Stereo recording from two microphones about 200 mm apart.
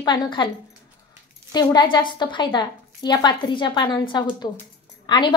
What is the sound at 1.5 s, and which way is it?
A woman's voice, 20° left (ahead or behind).